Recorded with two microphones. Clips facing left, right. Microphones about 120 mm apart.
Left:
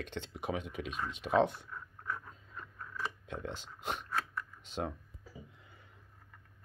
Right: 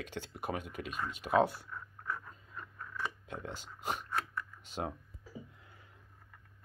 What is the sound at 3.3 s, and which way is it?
Speech, 10° right (ahead or behind).